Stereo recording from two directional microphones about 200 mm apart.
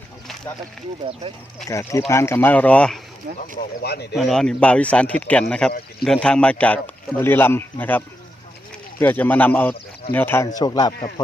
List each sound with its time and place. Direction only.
1.7 s speech: 15° left (ahead or behind)
3.3 s speech: 50° right (ahead or behind)
3.8 s speech: 55° left (ahead or behind)
4.1 s speech: centre (ahead or behind); by 11.1 s 20° left (ahead or behind)